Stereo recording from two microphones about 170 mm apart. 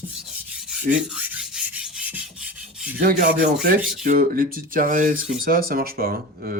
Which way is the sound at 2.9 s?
55° right (ahead or behind).